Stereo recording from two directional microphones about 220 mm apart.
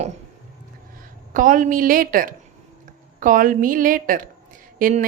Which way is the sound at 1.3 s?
35° right (ahead or behind).